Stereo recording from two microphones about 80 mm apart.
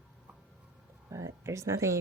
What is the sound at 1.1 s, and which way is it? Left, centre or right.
Speech, right.